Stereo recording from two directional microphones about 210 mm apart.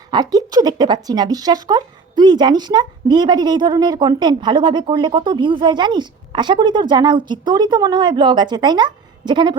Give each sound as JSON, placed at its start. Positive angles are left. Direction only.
{"t": 0.1, "sound": "speech", "side_deg": -20}